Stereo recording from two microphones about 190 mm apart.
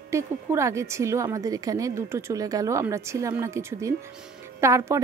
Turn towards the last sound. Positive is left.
turn(degrees=-15)  # may be behind; listen again after turning